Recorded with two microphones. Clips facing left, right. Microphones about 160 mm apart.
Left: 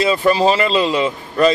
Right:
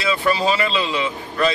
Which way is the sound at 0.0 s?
40° left (ahead or behind).